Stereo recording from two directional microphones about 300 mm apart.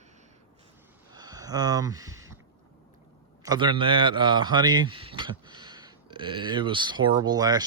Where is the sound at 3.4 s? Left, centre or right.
Centre.